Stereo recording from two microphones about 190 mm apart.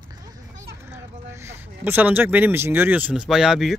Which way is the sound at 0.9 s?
10° right (ahead or behind).